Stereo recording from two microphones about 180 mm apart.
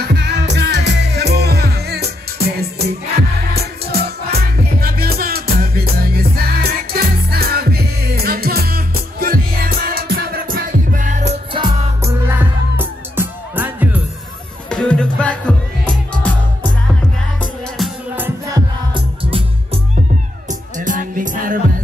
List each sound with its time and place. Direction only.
0.0 s music: 65° right (ahead or behind); by 11.3 s 45° right (ahead or behind)
11.5 s music: 20° right (ahead or behind)
14.7 s music: 5° left (ahead or behind)
17.7 s music: centre (ahead or behind)
18.9 s music: 30° right (ahead or behind)
20.4 s music: 45° right (ahead or behind)